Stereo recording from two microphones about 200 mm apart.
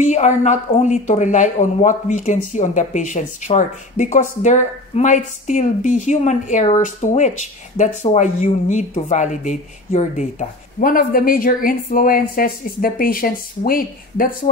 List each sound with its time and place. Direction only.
0.0 s a woman's voice: 35° left (ahead or behind)